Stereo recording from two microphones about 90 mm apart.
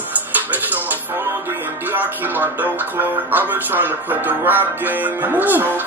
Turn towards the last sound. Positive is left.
turn(degrees=-20)  # may be behind; listen again after turning